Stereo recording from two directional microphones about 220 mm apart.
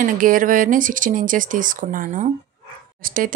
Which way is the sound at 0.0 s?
40° right (ahead or behind).